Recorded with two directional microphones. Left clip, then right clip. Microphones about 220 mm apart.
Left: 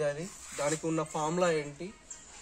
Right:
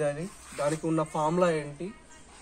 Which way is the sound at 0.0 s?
10° left (ahead or behind).